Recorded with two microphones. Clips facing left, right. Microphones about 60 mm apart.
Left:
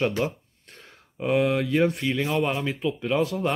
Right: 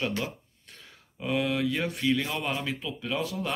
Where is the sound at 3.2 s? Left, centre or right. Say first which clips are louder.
Left 7 dB; left.